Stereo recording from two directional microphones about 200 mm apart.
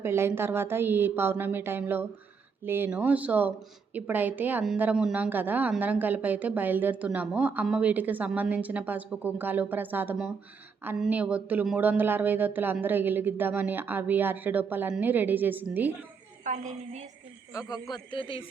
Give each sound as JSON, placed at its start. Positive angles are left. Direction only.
{"t": 0.0, "sound": "a woman's voice", "side_deg": -10}
{"t": 16.4, "sound": "a woman's voice", "side_deg": -40}
{"t": 17.5, "sound": "a man's voice", "side_deg": 15}